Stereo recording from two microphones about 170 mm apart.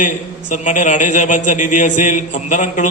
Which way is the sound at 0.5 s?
45° left (ahead or behind).